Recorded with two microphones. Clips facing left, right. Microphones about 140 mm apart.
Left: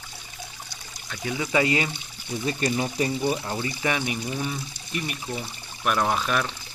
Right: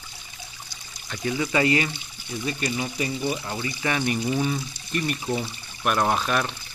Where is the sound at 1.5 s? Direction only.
20° left (ahead or behind).